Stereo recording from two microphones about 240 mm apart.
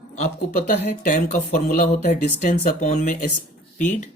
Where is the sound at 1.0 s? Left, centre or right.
Left.